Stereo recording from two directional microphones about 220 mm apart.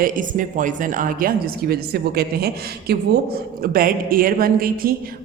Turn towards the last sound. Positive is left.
turn(degrees=-40)  # may be behind; listen again after turning